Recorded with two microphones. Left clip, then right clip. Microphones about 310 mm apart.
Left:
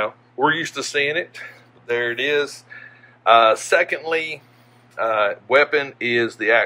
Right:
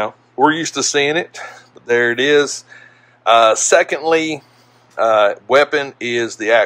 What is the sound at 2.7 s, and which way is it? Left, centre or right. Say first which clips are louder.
Speech: left 1 dB; centre.